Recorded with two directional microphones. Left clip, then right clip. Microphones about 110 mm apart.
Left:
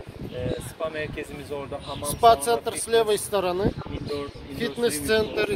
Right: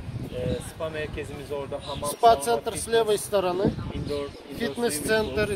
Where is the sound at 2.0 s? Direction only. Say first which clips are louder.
Left 1 dB; 15° right (ahead or behind).